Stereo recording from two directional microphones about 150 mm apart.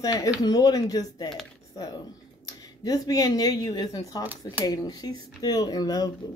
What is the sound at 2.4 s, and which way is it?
A woman's voice, 25° left (ahead or behind).